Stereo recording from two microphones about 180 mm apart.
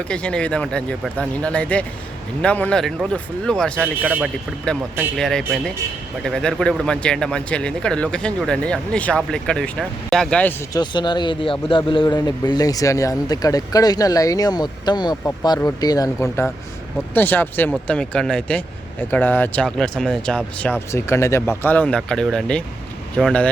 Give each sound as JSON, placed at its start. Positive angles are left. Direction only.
{"t": 0.1, "sound": "speech", "side_deg": 5}
{"t": 4.0, "sound": "speech", "side_deg": -10}
{"t": 5.1, "sound": "speech", "side_deg": 5}
{"t": 10.8, "sound": "speech", "side_deg": 25}